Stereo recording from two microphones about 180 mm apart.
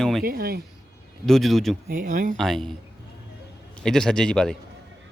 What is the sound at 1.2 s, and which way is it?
Speech, centre (ahead or behind).